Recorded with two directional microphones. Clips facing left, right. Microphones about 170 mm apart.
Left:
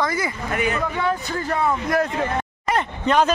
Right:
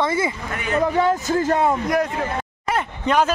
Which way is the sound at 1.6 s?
25° right (ahead or behind).